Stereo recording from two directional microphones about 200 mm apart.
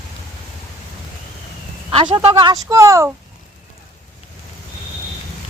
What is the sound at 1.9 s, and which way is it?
Speech, 25° right (ahead or behind).